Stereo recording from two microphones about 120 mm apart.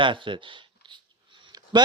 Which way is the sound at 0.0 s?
45° right (ahead or behind).